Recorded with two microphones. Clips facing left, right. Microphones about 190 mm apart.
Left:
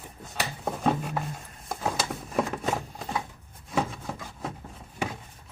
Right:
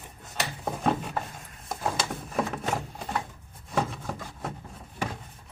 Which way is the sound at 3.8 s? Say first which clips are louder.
Even; centre (ahead or behind).